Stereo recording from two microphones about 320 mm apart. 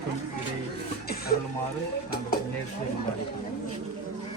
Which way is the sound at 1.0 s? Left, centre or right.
Left.